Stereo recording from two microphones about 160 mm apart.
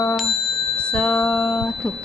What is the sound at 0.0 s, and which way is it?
Bicycle bell, 10° left (ahead or behind).